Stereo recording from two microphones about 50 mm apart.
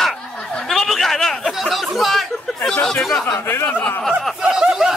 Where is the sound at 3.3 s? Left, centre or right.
Left.